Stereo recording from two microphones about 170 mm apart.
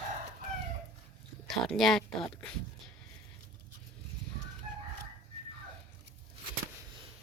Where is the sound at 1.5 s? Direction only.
Centre (ahead or behind).